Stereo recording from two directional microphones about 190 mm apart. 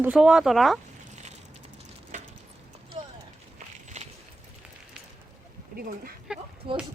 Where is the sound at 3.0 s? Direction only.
30° right (ahead or behind).